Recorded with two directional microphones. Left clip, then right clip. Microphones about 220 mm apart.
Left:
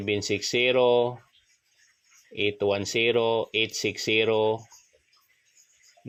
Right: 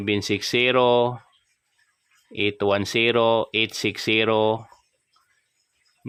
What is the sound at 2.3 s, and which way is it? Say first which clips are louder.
Speech: right 3 dB; 30° right (ahead or behind).